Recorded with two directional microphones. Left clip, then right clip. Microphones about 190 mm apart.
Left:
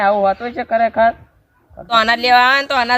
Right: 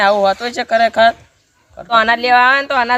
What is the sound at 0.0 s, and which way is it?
Speech, 10° right (ahead or behind).